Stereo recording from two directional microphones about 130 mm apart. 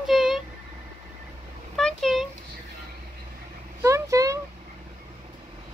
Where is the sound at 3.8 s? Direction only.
25° right (ahead or behind).